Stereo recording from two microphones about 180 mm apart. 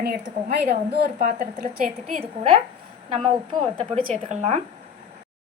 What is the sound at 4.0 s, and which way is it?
Speech, 40° right (ahead or behind).